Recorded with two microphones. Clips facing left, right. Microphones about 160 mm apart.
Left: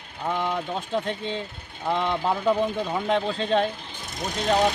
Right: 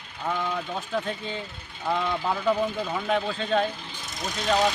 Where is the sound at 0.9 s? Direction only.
30° left (ahead or behind).